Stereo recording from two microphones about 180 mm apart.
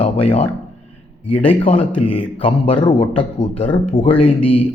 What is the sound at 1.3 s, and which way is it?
A man's voice, 30° left (ahead or behind).